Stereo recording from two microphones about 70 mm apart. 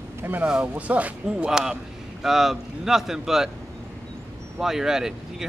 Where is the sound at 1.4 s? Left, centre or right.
Centre.